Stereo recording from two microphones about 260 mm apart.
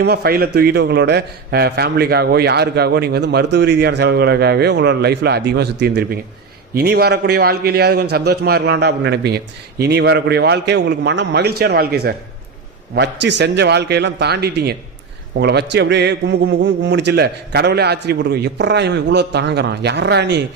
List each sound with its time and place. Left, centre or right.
0.0 s a man's voice: right